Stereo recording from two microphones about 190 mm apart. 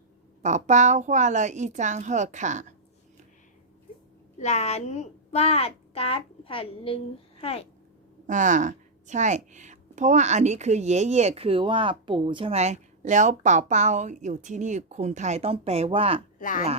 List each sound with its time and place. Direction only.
0.4 s a woman's voice: 40° right (ahead or behind)
4.4 s a woman's voice: 35° left (ahead or behind)
8.3 s a woman's voice: 40° right (ahead or behind)
16.4 s speech: 45° left (ahead or behind)